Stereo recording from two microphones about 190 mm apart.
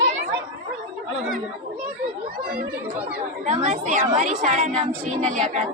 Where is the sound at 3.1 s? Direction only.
40° right (ahead or behind).